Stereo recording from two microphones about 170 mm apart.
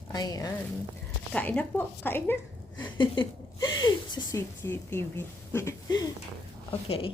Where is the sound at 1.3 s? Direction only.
10° left (ahead or behind).